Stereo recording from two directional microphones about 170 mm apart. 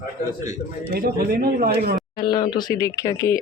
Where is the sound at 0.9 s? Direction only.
55° right (ahead or behind).